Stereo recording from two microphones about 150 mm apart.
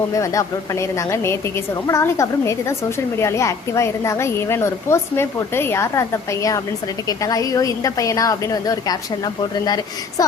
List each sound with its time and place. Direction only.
0.1 s a woman's voice: 20° left (ahead or behind)